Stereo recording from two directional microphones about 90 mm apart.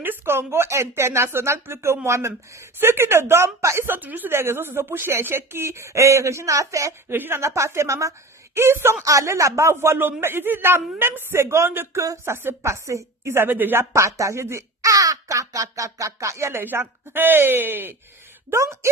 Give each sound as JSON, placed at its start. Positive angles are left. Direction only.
{"t": 0.0, "sound": "a woman's voice", "side_deg": -25}
{"t": 12.0, "sound": "a woman's voice", "side_deg": -35}
{"t": 13.9, "sound": "a woman's voice", "side_deg": -35}